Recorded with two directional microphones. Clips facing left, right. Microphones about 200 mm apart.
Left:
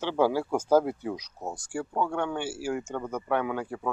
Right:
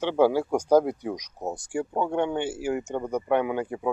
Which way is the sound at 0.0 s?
15° right (ahead or behind).